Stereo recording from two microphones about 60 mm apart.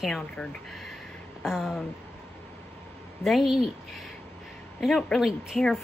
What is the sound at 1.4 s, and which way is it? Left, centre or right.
Speech, centre.